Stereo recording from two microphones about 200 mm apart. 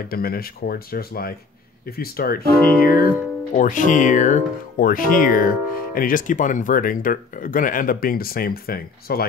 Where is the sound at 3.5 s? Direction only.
40° left (ahead or behind).